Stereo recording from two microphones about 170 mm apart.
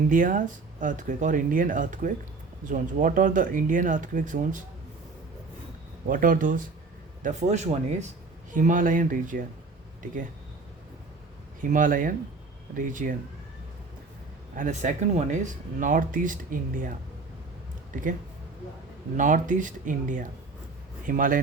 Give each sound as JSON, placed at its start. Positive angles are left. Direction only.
{"t": 0.1, "sound": "speech", "side_deg": -50}
{"t": 6.1, "sound": "speech", "side_deg": -55}
{"t": 11.6, "sound": "speech", "side_deg": -50}
{"t": 14.5, "sound": "speech", "side_deg": -50}
{"t": 19.1, "sound": "speech", "side_deg": -50}